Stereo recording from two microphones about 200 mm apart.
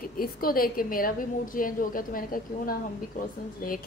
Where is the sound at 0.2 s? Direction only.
45° left (ahead or behind).